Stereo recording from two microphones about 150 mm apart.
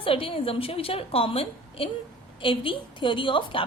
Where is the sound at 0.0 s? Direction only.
35° left (ahead or behind).